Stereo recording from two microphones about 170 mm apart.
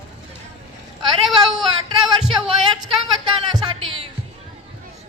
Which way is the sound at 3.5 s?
30° right (ahead or behind).